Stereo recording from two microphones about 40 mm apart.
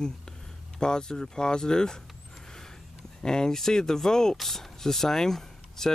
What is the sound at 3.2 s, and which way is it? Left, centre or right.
Speech, centre.